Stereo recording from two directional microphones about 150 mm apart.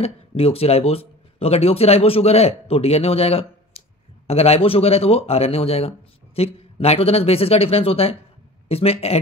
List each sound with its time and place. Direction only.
0.0 s speech: 40° left (ahead or behind)